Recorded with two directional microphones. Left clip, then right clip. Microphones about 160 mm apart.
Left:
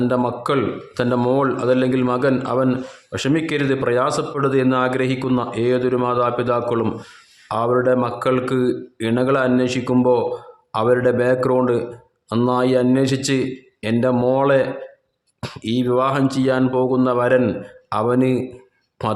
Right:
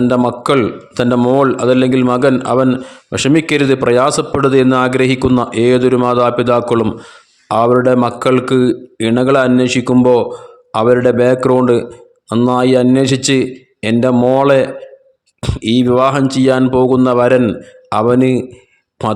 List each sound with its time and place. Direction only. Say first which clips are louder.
0.3 s a man's voice: right 7 dB; 40° right (ahead or behind)
15.4 s a man's voice: right 8 dB; 25° right (ahead or behind)
19.0 s speech: right 6 dB; 20° right (ahead or behind)